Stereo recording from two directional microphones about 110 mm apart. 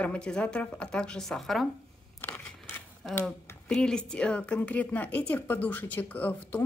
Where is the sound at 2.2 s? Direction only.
20° left (ahead or behind).